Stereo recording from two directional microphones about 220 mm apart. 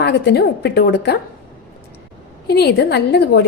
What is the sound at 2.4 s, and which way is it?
A woman's voice, 45° left (ahead or behind).